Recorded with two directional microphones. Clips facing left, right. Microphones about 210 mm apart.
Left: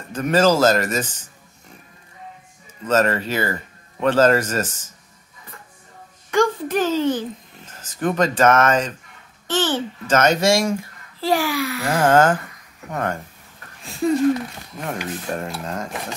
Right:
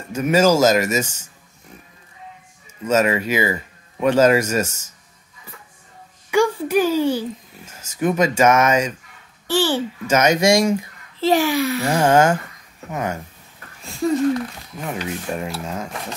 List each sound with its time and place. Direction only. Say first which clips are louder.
0.1 s a child's voice: right 1 dB; 10° right (ahead or behind)
2.9 s a child's voice: right 1 dB; 10° right (ahead or behind)
6.3 s a child's voice: right 2 dB; 10° right (ahead or behind); by 12.0 s 25° right (ahead or behind)
12.0 s a child's voice: even; 10° right (ahead or behind)
13.8 s a sound: left 1 dB; centre (ahead or behind)
15.0 s speech: right 1 dB; 5° right (ahead or behind)